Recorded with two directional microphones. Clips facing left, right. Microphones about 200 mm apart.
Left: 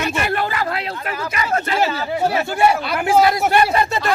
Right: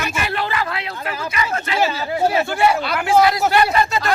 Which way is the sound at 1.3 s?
40° left (ahead or behind).